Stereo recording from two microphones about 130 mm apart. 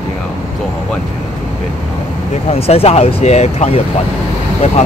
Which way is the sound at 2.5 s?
50° left (ahead or behind).